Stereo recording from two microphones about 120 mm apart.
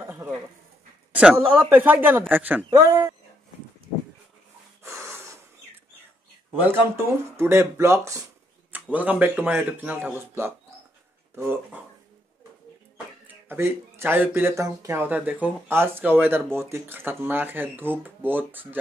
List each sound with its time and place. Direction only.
1.1 s speech: 10° right (ahead or behind)
2.7 s speech: 25° right (ahead or behind)
4.8 s snort: 25° right (ahead or behind)
6.6 s speech: 20° right (ahead or behind)
8.9 s speech: 10° right (ahead or behind)
13.5 s speech: 20° right (ahead or behind)
15.0 s speech: 15° right (ahead or behind)